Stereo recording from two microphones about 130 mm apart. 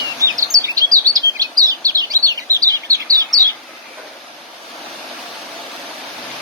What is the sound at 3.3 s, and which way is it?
Bird, centre (ahead or behind).